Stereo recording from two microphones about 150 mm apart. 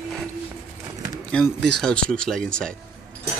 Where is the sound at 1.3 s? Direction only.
5° left (ahead or behind).